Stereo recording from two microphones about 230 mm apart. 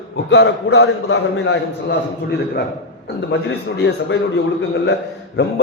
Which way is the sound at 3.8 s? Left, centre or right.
Left.